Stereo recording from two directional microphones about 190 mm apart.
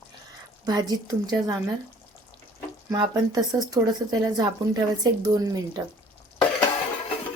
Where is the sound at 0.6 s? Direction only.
20° right (ahead or behind).